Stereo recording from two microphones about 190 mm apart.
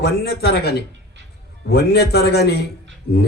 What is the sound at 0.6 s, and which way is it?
Speech, 60° left (ahead or behind).